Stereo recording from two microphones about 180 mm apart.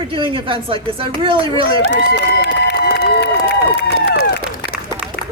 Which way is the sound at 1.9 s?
70° left (ahead or behind).